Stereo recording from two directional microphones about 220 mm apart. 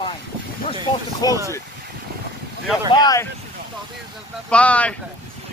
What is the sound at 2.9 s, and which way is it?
Speech, 20° left (ahead or behind).